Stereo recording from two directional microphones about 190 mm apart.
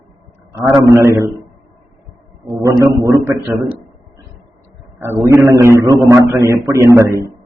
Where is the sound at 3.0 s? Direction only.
15° right (ahead or behind).